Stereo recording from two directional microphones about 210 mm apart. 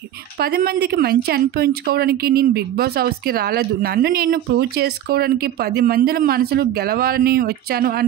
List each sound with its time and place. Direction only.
0.4 s speech: 45° right (ahead or behind)